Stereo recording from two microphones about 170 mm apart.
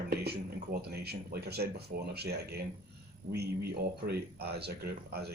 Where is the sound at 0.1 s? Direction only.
65° right (ahead or behind).